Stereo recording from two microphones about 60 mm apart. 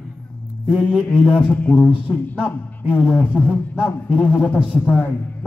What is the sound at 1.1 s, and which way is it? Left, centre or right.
A man's voice, left.